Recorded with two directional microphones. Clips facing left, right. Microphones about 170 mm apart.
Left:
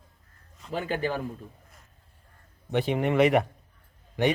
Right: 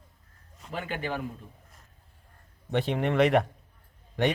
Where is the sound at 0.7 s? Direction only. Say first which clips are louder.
Left 4 dB; 35° left (ahead or behind).